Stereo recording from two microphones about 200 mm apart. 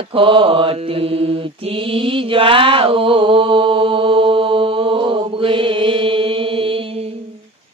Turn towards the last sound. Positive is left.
turn(degrees=-30)  # may be behind; listen again after turning